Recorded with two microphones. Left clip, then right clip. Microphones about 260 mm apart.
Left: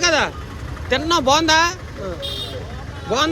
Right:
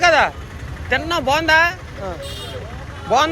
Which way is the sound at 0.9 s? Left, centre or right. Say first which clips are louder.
Left 2 dB; centre.